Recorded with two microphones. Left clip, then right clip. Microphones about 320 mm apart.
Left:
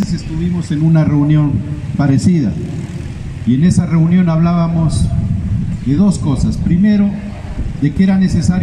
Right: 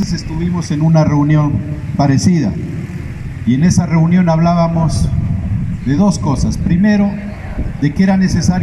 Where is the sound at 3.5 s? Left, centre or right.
Centre.